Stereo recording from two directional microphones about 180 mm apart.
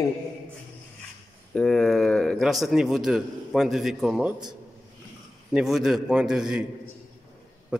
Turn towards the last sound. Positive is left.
turn(degrees=-5)  # may be behind; listen again after turning